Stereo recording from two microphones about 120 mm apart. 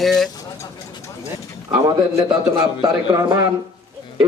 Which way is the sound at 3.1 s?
30° right (ahead or behind).